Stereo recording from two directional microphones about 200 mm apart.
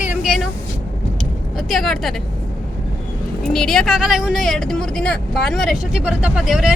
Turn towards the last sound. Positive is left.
turn(degrees=-5)  # may be behind; listen again after turning